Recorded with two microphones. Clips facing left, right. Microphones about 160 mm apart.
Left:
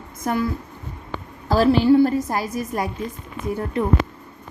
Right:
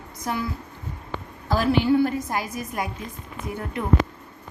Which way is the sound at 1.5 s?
35° left (ahead or behind).